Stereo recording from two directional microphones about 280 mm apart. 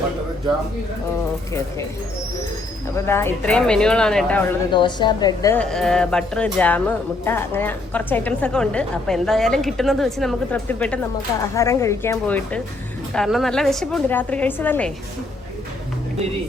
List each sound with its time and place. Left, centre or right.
2.9 s a woman's voice: centre
4.7 s a woman's voice: centre